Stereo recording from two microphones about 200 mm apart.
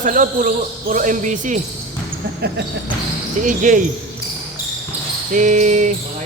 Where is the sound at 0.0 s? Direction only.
40° right (ahead or behind).